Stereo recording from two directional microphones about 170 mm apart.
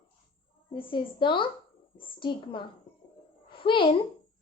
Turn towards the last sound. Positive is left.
turn(degrees=30)  # may be behind; listen again after turning